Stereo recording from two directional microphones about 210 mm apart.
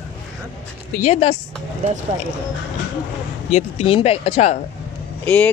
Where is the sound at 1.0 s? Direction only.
30° left (ahead or behind).